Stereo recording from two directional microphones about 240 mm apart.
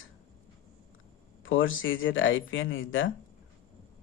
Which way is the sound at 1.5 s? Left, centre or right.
Left.